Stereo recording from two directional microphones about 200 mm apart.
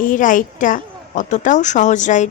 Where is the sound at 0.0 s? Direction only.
40° left (ahead or behind).